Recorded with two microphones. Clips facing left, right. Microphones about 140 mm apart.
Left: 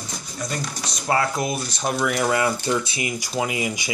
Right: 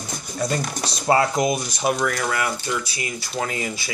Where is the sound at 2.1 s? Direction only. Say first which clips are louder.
Left 3 dB; 20° left (ahead or behind).